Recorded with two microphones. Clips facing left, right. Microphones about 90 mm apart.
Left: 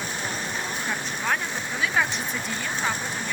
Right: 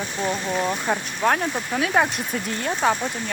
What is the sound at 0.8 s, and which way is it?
Speech, 55° right (ahead or behind).